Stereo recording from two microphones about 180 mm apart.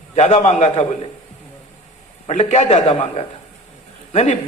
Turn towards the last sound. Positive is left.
turn(degrees=40)  # may be behind; listen again after turning